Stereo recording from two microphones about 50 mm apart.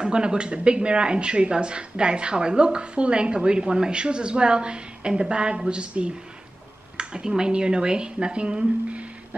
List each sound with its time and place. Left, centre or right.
0.0 s a woman's voice: centre